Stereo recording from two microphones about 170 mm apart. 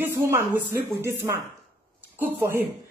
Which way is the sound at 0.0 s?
15° right (ahead or behind).